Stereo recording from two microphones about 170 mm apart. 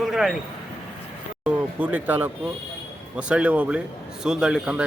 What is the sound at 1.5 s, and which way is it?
A man's voice, 10° right (ahead or behind).